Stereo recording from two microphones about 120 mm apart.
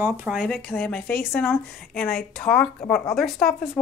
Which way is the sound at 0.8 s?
10° left (ahead or behind).